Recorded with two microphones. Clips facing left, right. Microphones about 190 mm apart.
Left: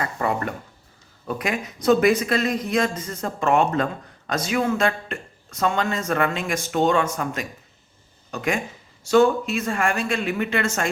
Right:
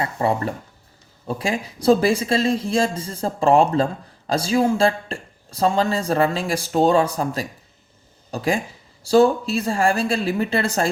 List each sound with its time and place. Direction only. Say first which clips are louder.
0.0 s a man's voice: right 3 dB; 30° right (ahead or behind)